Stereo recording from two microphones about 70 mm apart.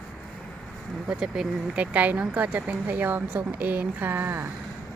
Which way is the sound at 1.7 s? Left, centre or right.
Right.